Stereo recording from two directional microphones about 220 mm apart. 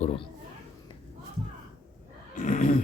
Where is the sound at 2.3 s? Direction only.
35° left (ahead or behind).